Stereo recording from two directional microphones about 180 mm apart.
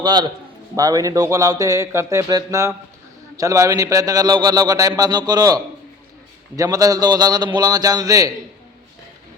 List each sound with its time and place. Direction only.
0.0 s a man's voice: 25° right (ahead or behind)
6.6 s a man's voice: 20° right (ahead or behind)